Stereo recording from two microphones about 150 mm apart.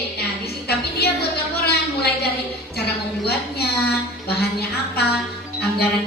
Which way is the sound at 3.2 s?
90° left.